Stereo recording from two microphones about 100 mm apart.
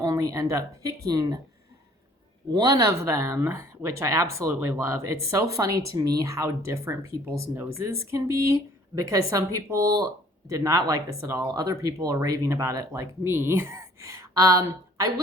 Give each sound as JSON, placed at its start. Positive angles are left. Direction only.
{"t": 0.1, "sound": "speech", "side_deg": -35}
{"t": 2.5, "sound": "speech", "side_deg": -45}